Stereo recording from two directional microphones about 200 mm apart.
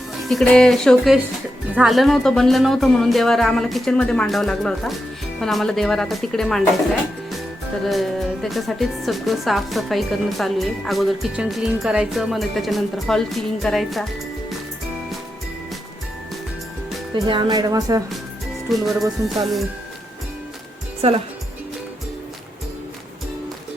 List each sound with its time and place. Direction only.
0.2 s speech: centre (ahead or behind)
7.9 s speech: centre (ahead or behind)
17.2 s speech: 25° right (ahead or behind)
18.7 s speech: centre (ahead or behind)
21.0 s speech: 30° right (ahead or behind)